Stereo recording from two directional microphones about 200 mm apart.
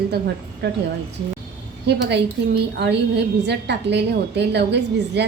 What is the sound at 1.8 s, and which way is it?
A woman's voice, 55° right (ahead or behind).